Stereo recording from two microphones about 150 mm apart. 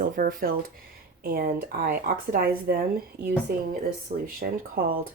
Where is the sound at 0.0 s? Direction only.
70° right (ahead or behind).